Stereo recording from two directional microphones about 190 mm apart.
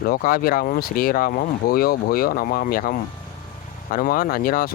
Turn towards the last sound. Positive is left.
turn(degrees=50)  # may be behind; listen again after turning